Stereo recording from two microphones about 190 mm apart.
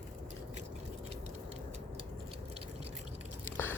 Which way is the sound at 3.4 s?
10° left (ahead or behind).